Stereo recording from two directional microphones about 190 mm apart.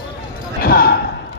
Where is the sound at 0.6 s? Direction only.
55° left (ahead or behind).